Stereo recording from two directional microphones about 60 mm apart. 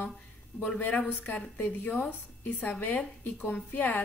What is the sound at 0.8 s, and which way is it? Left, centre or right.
A woman's voice, left.